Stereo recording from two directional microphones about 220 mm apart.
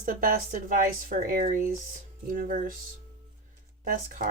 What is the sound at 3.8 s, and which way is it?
Speech, 35° right (ahead or behind).